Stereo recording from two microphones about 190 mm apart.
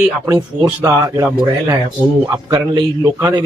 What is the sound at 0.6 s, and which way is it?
A man's voice, 15° right (ahead or behind).